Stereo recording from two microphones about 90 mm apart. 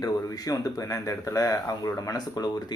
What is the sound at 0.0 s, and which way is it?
Speech, 40° left (ahead or behind).